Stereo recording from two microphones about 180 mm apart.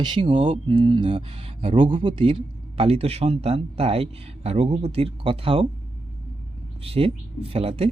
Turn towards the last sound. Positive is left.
turn(degrees=-35)  # may be behind; listen again after turning